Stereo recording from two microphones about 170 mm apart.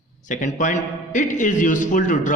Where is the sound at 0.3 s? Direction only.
45° left (ahead or behind).